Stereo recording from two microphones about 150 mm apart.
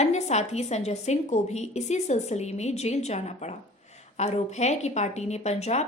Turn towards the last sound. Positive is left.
turn(degrees=45)  # may be behind; listen again after turning